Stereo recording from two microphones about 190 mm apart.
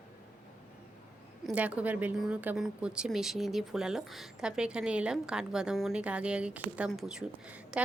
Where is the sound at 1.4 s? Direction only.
5° right (ahead or behind).